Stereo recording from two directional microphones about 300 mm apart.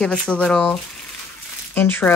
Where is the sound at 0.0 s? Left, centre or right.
Centre.